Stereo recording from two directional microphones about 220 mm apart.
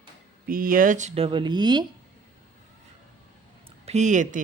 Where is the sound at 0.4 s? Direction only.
40° right (ahead or behind); by 1.8 s 20° right (ahead or behind).